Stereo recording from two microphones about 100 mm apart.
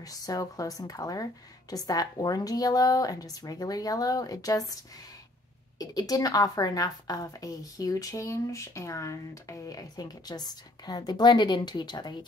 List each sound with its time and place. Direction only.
0.0 s a woman's voice: 35° left (ahead or behind)
5.8 s a woman's voice: 40° left (ahead or behind)